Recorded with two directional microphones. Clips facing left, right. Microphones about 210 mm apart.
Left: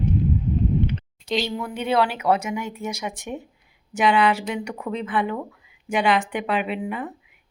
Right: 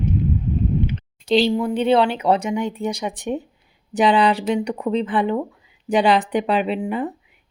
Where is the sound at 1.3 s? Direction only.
30° right (ahead or behind).